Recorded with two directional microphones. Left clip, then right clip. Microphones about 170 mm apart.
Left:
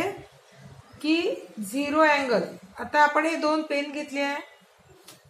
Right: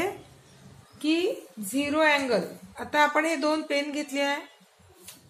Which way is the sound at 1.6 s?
25° right (ahead or behind).